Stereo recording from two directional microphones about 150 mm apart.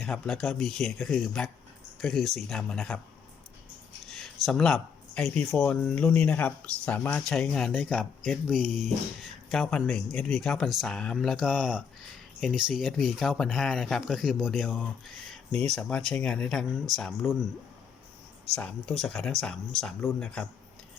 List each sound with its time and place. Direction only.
0.0 s speech: 5° left (ahead or behind)
4.1 s speech: centre (ahead or behind)
18.5 s speech: 5° left (ahead or behind)